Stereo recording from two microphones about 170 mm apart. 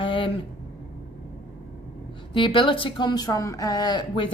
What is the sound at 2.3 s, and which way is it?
Speech, 30° left (ahead or behind).